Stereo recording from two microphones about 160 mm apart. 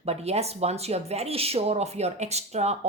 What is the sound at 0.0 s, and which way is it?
A woman's voice, 40° right (ahead or behind).